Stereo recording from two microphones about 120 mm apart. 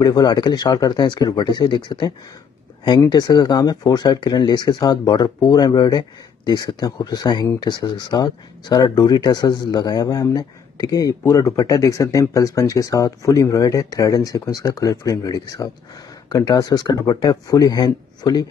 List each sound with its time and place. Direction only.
0.0 s speech: 35° left (ahead or behind)